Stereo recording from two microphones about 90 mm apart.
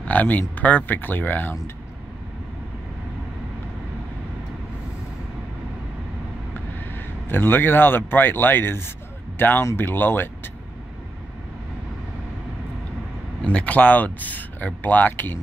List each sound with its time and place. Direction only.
0.0 s speech: 15° left (ahead or behind)
6.9 s speech: 25° left (ahead or behind)
13.4 s speech: 10° left (ahead or behind)